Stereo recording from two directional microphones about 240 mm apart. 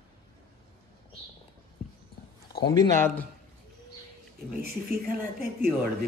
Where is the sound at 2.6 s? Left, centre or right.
Centre.